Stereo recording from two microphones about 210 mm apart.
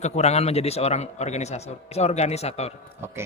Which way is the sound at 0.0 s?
30° left (ahead or behind).